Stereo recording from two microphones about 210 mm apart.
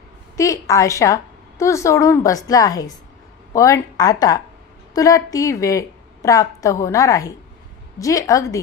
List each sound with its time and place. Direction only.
0.4 s a woman's voice: 15° left (ahead or behind)